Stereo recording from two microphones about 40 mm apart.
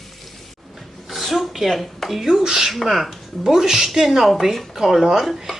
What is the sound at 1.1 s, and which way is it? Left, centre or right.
Speech, centre.